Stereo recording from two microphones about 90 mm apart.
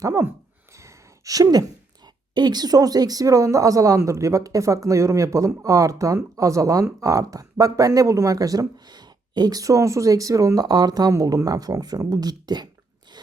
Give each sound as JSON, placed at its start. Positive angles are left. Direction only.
{"t": 0.0, "sound": "speech", "side_deg": -35}
{"t": 0.8, "sound": "gasp", "side_deg": -35}
{"t": 2.3, "sound": "speech", "side_deg": -50}